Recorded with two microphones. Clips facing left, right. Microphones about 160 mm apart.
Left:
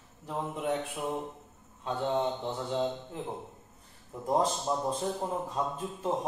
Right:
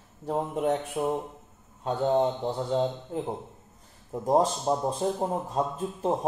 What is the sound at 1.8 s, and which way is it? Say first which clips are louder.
A man's voice: right 6 dB; 35° right (ahead or behind).